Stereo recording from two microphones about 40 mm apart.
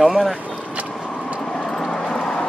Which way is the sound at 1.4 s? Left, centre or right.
Centre.